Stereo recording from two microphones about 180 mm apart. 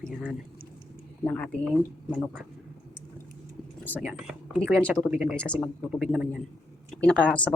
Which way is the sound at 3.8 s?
10° left (ahead or behind).